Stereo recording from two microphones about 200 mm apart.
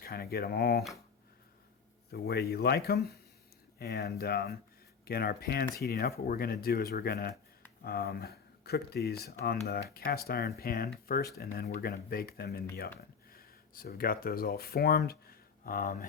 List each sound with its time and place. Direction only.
0.0 s speech: 50° left (ahead or behind)
2.1 s speech: 50° left (ahead or behind)